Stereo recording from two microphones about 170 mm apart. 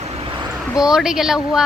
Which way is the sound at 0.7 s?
5° right (ahead or behind).